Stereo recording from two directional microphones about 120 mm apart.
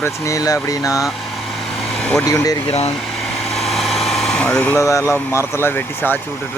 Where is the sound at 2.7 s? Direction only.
60° left (ahead or behind).